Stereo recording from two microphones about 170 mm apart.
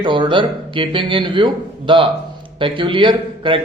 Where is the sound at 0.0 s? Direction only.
30° right (ahead or behind).